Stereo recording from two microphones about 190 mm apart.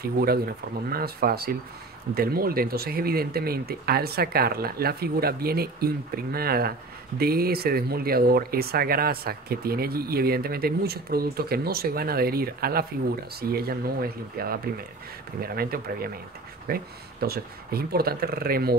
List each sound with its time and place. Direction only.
0.0 s speech: 55° right (ahead or behind)